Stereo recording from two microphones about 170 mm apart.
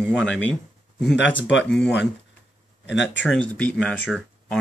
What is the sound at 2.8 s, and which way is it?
Speech, 90° left.